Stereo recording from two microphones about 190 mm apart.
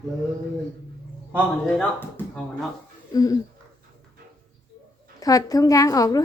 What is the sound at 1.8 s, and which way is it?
Speech, 5° left (ahead or behind).